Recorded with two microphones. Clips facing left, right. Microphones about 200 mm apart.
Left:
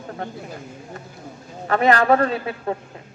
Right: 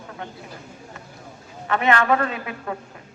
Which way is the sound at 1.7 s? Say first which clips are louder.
Left 3 dB; 35° left (ahead or behind).